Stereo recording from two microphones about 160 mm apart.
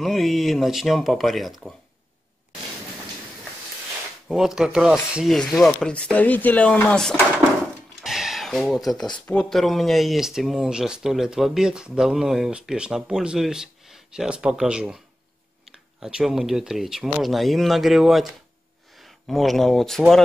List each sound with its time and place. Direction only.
0.0 s speech: centre (ahead or behind)
4.3 s speech: 5° right (ahead or behind)
8.0 s a sound: centre (ahead or behind)
9.2 s speech: 5° left (ahead or behind)
16.0 s speech: 5° right (ahead or behind)